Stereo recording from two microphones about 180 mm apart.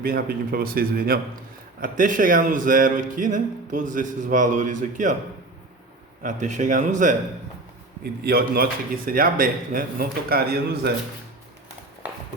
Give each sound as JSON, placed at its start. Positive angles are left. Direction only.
{"t": 0.0, "sound": "speech", "side_deg": -55}
{"t": 6.2, "sound": "speech", "side_deg": -45}
{"t": 8.0, "sound": "speech", "side_deg": -60}